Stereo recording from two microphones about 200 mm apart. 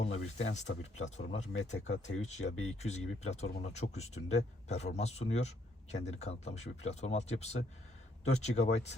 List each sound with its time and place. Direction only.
0.0 s speech: 35° left (ahead or behind)